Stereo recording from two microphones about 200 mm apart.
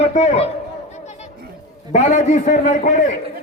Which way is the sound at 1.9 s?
35° left (ahead or behind).